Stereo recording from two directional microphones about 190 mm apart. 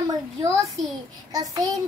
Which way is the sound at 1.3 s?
20° right (ahead or behind).